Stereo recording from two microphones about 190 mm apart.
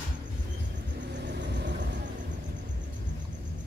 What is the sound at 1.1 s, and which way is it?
Vehicle, 65° right (ahead or behind).